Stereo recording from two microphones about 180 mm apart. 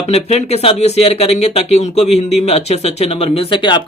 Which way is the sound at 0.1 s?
35° left (ahead or behind).